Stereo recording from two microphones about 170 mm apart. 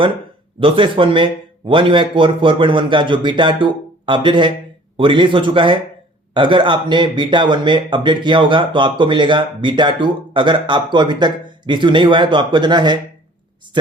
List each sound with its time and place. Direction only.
0.6 s a man's voice: 30° right (ahead or behind)